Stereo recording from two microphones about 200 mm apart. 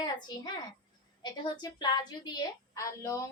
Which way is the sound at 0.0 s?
20° left (ahead or behind).